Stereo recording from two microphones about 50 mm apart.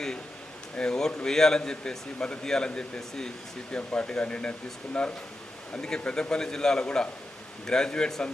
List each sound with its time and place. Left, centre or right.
0.8 s a man's voice: centre
5.7 s a man's voice: centre